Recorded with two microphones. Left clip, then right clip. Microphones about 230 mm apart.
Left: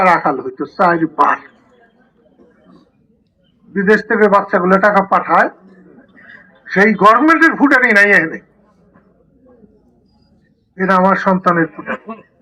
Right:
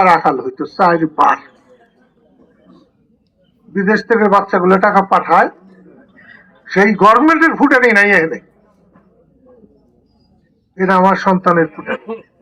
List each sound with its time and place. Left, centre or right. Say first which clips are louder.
0.0 s a man's voice: right 2 dB; right
3.7 s a man's voice: left 1 dB; right
10.8 s a man's voice: right 1 dB; right